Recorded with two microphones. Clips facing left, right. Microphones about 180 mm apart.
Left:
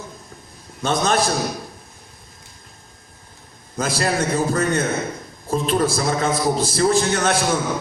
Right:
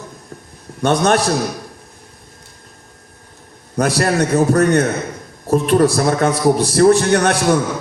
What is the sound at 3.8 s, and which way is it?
A man's voice, 65° right (ahead or behind).